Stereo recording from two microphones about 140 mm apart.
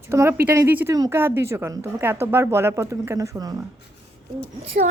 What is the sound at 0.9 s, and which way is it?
Speech, 25° right (ahead or behind).